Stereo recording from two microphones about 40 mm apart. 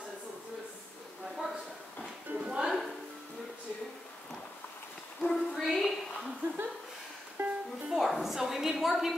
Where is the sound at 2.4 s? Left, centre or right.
Centre.